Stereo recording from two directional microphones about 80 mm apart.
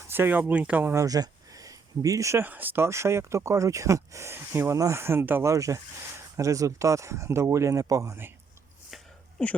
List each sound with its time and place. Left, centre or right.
0.1 s speech: right
1.0 s a sound: right
2.4 s speech: right
5.5 s speech: right
9.4 s speech: centre